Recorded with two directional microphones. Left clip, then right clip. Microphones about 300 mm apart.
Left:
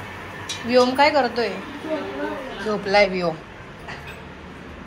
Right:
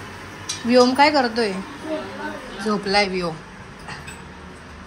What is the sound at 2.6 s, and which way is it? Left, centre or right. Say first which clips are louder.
Speech: left 2 dB; centre.